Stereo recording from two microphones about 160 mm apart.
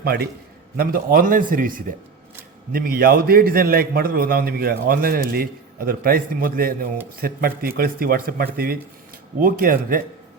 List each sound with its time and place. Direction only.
0.0 s a man's voice: 75° right (ahead or behind)
0.8 s a man's voice: 65° right (ahead or behind)